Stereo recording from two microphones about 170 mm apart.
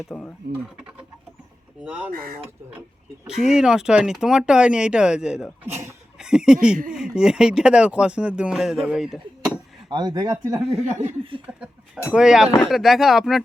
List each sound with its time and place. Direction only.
0.1 s speech: 5° left (ahead or behind)
1.8 s speech: 5° right (ahead or behind)
3.2 s speech: 5° right (ahead or behind)
9.9 s speech: 25° right (ahead or behind)
10.7 s speech: 40° right (ahead or behind)
11.5 s speech: 10° right (ahead or behind)